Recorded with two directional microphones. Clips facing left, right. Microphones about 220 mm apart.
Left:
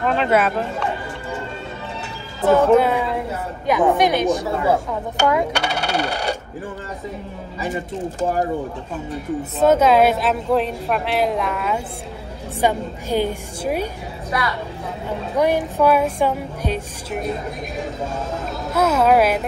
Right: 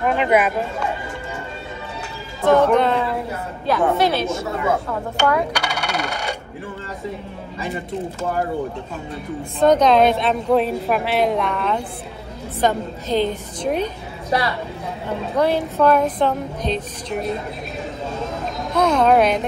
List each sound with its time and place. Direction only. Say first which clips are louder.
0.0 s speech: right 1 dB; 15° right (ahead or behind)
2.4 s speech: left 1 dB; 5° left (ahead or behind)
5.3 s speech: left 1 dB; 25° left (ahead or behind)
9.6 s a woman's voice: even; 5° left (ahead or behind)
14.3 s a woman's voice: right 3 dB; 30° right (ahead or behind)
15.3 s speech: even; 10° left (ahead or behind)
18.7 s a woman's voice: even; 5° left (ahead or behind)